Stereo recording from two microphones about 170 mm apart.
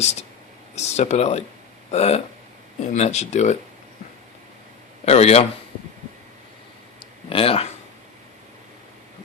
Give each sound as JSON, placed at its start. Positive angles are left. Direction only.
{"t": 0.0, "sound": "speech", "side_deg": 40}
{"t": 5.0, "sound": "speech", "side_deg": 40}
{"t": 7.0, "sound": "a sound", "side_deg": 35}